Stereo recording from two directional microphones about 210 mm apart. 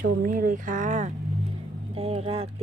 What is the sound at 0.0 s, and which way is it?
Speech, 45° right (ahead or behind).